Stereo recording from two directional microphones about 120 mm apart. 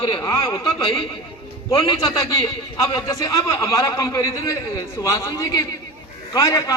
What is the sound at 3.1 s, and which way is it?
A man's voice, 25° left (ahead or behind).